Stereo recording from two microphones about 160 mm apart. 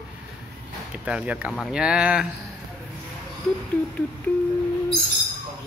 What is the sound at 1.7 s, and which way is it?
Speech, 5° right (ahead or behind).